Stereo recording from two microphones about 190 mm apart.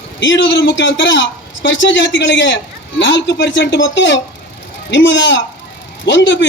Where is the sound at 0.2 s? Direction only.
70° left (ahead or behind).